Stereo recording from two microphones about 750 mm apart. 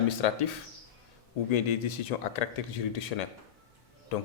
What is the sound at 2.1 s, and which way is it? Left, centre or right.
Speech, left.